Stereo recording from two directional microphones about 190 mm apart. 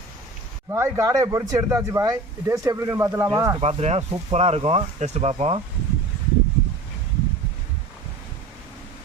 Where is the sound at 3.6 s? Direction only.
35° right (ahead or behind).